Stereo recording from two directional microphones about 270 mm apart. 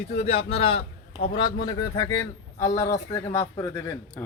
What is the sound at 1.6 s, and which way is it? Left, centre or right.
A man's voice, centre.